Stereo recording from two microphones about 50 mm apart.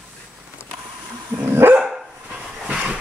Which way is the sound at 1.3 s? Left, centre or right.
Right.